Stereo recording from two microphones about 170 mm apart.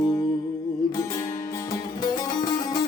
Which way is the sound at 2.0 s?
25° left (ahead or behind).